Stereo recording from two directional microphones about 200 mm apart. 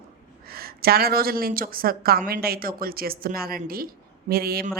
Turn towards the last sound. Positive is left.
turn(degrees=-50)  # may be behind; listen again after turning